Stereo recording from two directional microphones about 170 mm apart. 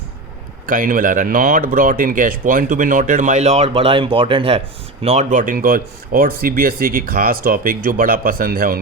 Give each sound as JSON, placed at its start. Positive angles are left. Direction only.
{"t": 0.7, "sound": "speech", "side_deg": -55}
{"t": 5.0, "sound": "speech", "side_deg": -45}